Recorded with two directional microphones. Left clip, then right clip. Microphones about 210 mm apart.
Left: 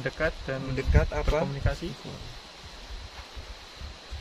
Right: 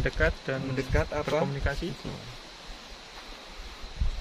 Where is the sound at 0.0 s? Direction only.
25° right (ahead or behind).